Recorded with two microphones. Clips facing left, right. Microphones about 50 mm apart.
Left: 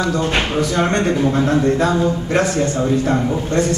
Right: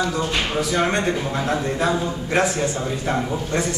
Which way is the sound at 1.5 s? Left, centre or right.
Centre.